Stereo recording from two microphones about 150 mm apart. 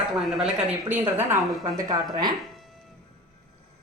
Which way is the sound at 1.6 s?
25° right (ahead or behind).